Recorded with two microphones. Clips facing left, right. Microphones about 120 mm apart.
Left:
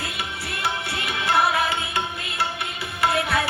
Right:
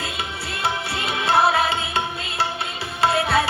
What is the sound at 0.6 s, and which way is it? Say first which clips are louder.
Tabla: right 3 dB; 25° right (ahead or behind).